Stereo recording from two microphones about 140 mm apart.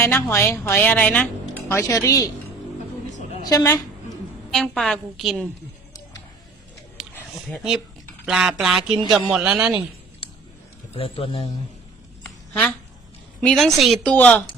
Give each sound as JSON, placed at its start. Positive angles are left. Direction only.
{"t": 0.0, "sound": "speech", "side_deg": 20}
{"t": 3.5, "sound": "a woman's voice", "side_deg": 25}
{"t": 4.5, "sound": "a woman's voice", "side_deg": 0}
{"t": 7.0, "sound": "a sound", "side_deg": -5}
{"t": 7.5, "sound": "a woman's voice", "side_deg": -5}
{"t": 10.2, "sound": "a sound", "side_deg": 40}
{"t": 10.9, "sound": "a man's voice", "side_deg": 45}
{"t": 12.2, "sound": "a sound", "side_deg": 10}
{"t": 13.4, "sound": "speech", "side_deg": 5}